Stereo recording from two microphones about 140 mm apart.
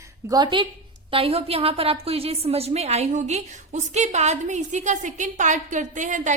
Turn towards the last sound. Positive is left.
turn(degrees=-60)  # may be behind; listen again after turning